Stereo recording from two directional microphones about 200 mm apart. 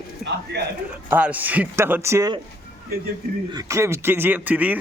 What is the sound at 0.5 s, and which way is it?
Speech, 60° right (ahead or behind).